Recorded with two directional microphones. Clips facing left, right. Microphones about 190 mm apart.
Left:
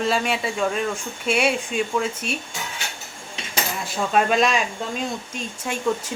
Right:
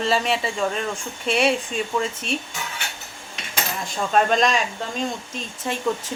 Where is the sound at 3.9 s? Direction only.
5° left (ahead or behind).